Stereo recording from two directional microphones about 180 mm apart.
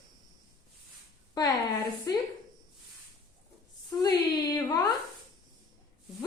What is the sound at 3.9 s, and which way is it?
Speech, 20° left (ahead or behind).